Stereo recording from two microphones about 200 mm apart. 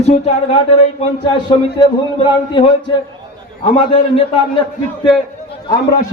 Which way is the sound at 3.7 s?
25° left (ahead or behind).